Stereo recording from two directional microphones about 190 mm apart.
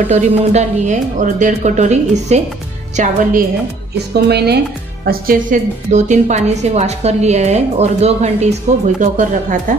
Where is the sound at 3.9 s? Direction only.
60° right (ahead or behind).